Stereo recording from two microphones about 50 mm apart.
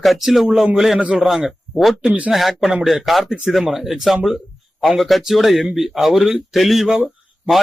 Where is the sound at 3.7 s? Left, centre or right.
Centre.